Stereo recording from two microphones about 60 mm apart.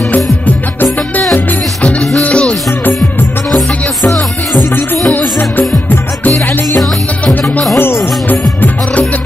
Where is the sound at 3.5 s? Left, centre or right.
Centre.